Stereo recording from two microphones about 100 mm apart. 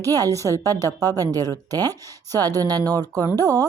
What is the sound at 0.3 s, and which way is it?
Speech, 30° left (ahead or behind).